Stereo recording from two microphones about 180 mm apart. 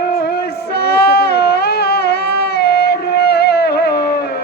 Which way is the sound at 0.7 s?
60° left (ahead or behind).